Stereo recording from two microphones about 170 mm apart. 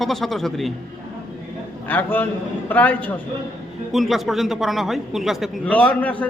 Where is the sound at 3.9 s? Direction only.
Centre (ahead or behind).